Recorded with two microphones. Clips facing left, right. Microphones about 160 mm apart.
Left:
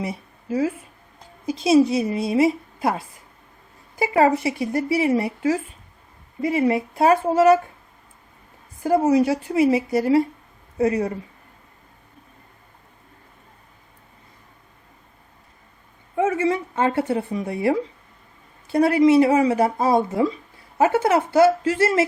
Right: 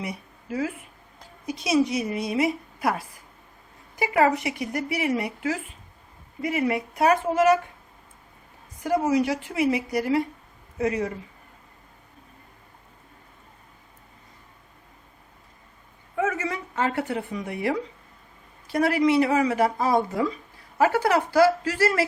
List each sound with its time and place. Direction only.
0.0 s a woman's voice: 25° left (ahead or behind)
8.8 s a woman's voice: 30° left (ahead or behind)
16.1 s a woman's voice: 25° left (ahead or behind)